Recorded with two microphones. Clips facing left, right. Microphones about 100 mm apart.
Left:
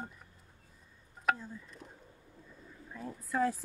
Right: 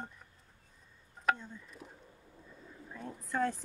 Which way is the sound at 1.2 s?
5° left (ahead or behind).